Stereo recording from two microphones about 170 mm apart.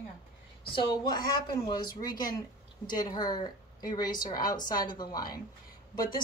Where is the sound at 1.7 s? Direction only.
25° left (ahead or behind).